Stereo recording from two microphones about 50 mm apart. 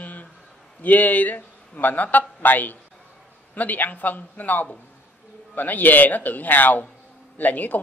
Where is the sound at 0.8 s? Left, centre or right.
Left.